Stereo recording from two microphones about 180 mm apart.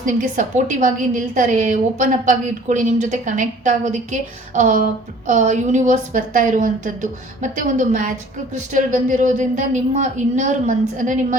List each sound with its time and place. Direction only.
0.0 s a woman's voice: 45° right (ahead or behind)